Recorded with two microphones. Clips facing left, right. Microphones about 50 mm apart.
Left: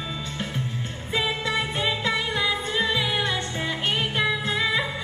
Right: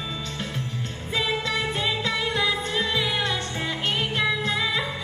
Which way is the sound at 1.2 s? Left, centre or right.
Centre.